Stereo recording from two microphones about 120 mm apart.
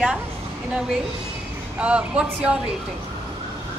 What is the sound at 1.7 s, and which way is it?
Speech, 10° right (ahead or behind).